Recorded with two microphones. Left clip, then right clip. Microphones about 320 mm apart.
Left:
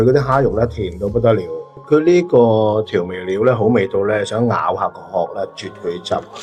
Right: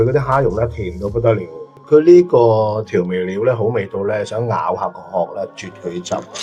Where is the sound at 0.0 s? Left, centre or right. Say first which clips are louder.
Left 1 dB; left.